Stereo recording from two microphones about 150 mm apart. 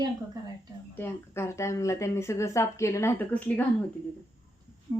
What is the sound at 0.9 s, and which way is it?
Speech, 15° left (ahead or behind).